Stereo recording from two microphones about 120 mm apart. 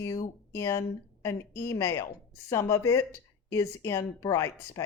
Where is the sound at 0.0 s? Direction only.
25° left (ahead or behind).